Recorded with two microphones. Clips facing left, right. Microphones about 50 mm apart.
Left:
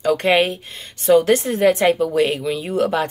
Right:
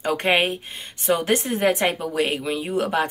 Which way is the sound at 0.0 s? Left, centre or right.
Right.